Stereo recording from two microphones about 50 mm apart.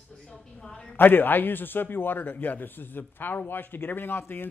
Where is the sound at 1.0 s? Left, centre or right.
Left.